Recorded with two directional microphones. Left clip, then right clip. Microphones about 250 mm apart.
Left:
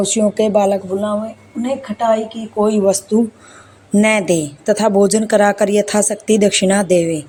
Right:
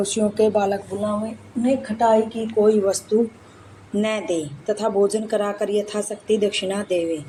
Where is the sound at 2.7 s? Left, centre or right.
Left.